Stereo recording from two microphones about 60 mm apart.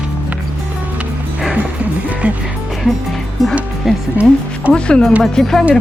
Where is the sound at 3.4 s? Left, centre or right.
Centre.